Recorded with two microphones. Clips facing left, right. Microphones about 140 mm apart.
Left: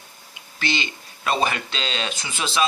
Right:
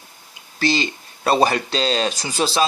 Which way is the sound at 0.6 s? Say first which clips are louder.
Right 7 dB; 35° right (ahead or behind).